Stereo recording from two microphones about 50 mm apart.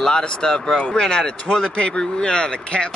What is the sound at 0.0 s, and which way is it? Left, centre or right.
Speech, centre.